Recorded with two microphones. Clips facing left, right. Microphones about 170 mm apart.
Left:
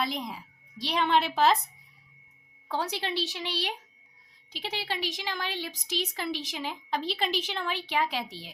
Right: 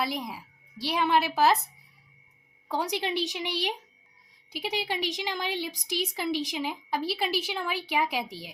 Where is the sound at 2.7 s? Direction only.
15° right (ahead or behind).